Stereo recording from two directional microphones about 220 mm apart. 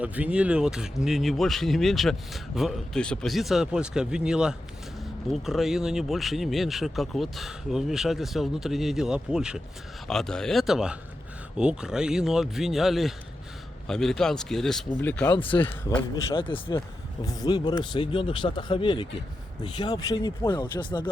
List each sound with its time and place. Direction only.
0.0 s speech: 5° right (ahead or behind)
15.4 s speech: 25° left (ahead or behind)
15.6 s speech: 5° left (ahead or behind)
16.3 s speech: 25° left (ahead or behind)